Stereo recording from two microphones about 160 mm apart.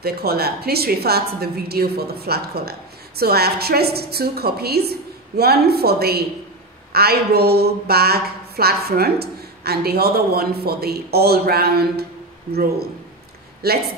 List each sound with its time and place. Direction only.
0.0 s a woman's voice: 75° right (ahead or behind)